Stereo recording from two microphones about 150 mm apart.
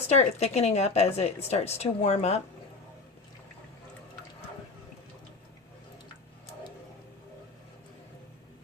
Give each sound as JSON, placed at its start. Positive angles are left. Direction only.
{"t": 0.1, "sound": "a woman's voice", "side_deg": 45}